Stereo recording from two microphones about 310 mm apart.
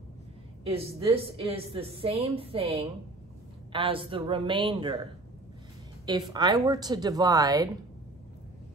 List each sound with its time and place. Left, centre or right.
0.7 s a woman's voice: centre
6.0 s a woman's voice: centre